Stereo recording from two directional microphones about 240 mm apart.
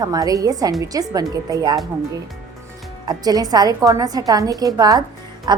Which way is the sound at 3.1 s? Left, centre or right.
Centre.